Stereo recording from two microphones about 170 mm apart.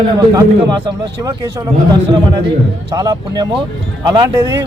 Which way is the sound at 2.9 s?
20° right (ahead or behind).